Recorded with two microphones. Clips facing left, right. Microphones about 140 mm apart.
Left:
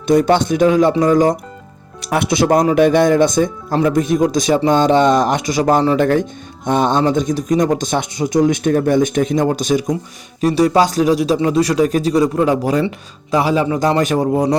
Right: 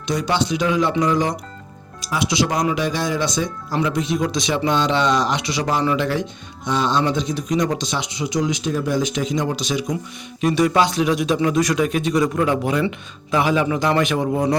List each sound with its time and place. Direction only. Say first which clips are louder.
0.1 s speech: left 8 dB; 50° left (ahead or behind)
2.0 s speech: left 5 dB; 60° left (ahead or behind)
10.4 s a man's voice: left 4 dB; 35° left (ahead or behind)
14.3 s speech: left 4 dB; 20° left (ahead or behind)